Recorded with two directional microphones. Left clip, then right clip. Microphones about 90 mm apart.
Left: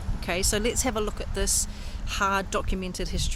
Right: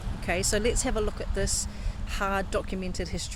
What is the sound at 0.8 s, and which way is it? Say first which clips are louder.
Speech: left 1 dB; 50° left (ahead or behind).